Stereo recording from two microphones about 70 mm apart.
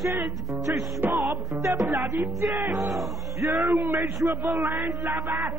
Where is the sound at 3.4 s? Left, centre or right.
Right.